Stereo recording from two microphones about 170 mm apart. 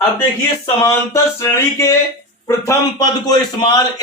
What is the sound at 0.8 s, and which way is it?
Speech, 15° left (ahead or behind).